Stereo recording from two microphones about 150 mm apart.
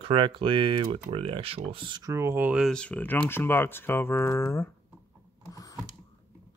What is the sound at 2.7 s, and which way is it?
Speech, 5° left (ahead or behind).